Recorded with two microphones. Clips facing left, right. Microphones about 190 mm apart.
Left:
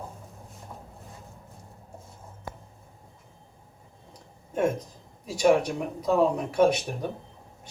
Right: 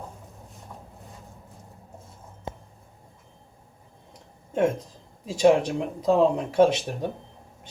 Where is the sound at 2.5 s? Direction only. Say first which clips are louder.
Right 4 dB; 20° right (ahead or behind).